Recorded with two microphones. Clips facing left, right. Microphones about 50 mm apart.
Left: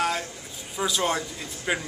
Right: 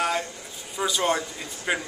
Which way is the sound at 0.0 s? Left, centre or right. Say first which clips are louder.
Right 1 dB; centre.